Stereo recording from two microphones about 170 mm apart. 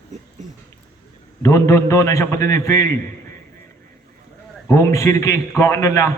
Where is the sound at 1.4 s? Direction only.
20° left (ahead or behind).